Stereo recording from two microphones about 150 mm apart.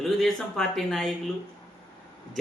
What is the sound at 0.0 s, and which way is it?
Speech, centre (ahead or behind).